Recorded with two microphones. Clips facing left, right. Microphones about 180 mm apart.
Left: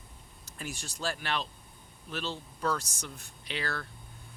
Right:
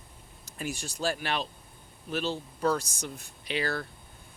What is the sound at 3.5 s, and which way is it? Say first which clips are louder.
Speech: right 6 dB; 10° right (ahead or behind).